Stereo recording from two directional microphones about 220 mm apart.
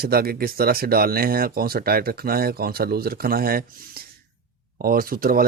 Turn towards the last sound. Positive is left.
turn(degrees=-40)  # may be behind; listen again after turning